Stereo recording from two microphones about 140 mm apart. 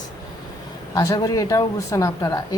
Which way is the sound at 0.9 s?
25° left (ahead or behind).